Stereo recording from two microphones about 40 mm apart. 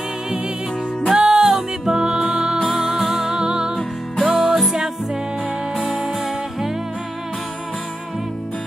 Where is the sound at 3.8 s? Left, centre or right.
Centre.